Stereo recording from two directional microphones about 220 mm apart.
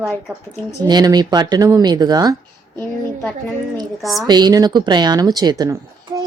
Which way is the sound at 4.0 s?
Centre (ahead or behind).